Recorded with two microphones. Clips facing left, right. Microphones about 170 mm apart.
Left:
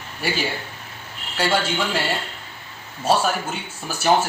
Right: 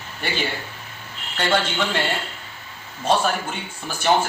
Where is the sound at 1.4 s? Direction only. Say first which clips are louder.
Even; 5° left (ahead or behind).